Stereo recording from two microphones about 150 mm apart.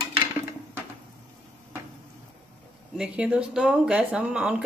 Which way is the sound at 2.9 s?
5° right (ahead or behind).